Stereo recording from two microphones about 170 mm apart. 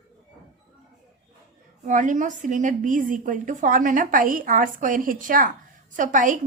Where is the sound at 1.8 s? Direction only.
50° right (ahead or behind).